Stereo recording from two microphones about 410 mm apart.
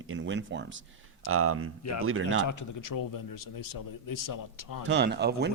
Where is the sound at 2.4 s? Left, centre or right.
Left.